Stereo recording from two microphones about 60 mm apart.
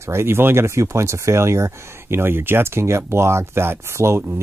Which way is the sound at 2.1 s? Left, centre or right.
Right.